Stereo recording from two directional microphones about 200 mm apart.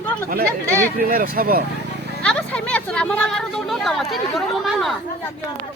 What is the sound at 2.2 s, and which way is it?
A woman's voice, 5° left (ahead or behind).